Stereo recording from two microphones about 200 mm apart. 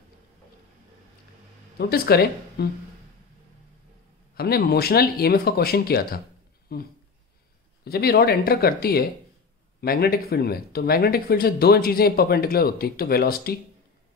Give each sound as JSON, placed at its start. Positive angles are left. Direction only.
{"t": 1.8, "sound": "speech", "side_deg": 50}
{"t": 4.4, "sound": "speech", "side_deg": 50}